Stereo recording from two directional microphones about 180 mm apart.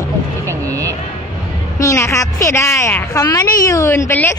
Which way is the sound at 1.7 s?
15° left (ahead or behind).